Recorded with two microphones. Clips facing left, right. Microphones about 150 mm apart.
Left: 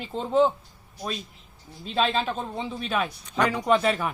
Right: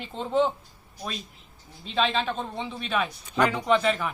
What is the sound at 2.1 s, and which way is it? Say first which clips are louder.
Speech: left 1 dB; 5° left (ahead or behind).